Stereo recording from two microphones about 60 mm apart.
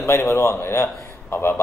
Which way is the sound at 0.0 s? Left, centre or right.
Left.